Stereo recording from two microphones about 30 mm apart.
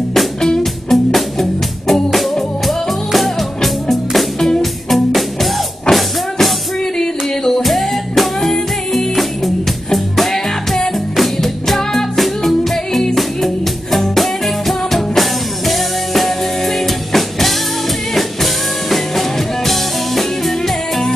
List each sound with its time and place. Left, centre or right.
0.8 s music: centre
7.0 s a sound: centre
7.6 s music: centre
10.3 s music: centre
11.1 s music: centre